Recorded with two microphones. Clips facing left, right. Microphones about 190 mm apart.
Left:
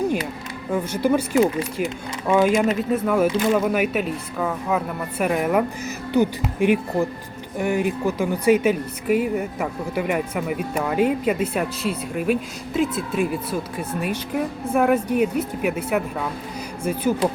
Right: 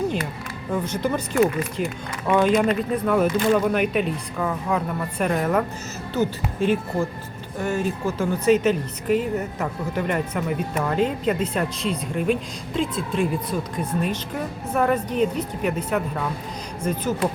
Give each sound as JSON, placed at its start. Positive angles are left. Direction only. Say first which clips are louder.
{"t": 0.7, "sound": "speech", "louder": "left 4 dB", "side_deg": 10}